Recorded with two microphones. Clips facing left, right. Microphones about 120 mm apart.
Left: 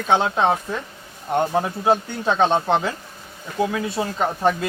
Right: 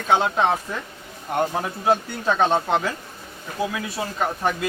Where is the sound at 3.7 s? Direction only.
25° left (ahead or behind).